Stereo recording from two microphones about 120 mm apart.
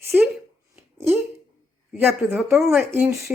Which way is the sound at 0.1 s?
10° right (ahead or behind).